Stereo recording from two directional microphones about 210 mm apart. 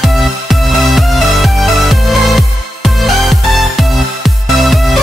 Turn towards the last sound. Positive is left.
turn(degrees=0)  # may be behind; listen again after turning